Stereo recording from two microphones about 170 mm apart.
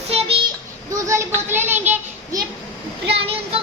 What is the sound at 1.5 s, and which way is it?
Speech, 10° right (ahead or behind).